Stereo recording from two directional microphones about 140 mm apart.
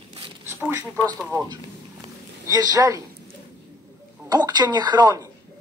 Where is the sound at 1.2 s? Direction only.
20° right (ahead or behind).